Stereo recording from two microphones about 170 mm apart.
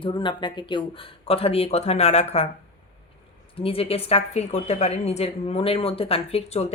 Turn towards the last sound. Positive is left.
turn(degrees=40)  # may be behind; listen again after turning